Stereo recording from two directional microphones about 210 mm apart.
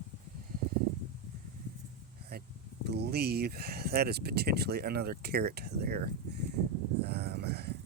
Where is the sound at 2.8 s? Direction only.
50° right (ahead or behind).